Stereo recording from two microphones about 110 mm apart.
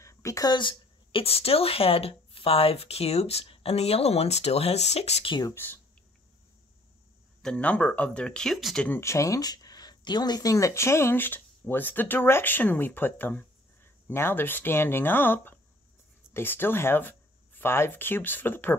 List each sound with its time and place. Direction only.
0.0 s a woman's voice: 30° left (ahead or behind); by 5.3 s 70° left (ahead or behind)
5.5 s speech: 20° left (ahead or behind)
7.4 s speech: 10° left (ahead or behind)
8.8 s speech: 20° left (ahead or behind)